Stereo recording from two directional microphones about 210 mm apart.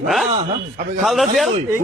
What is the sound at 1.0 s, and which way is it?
Speech, centre (ahead or behind).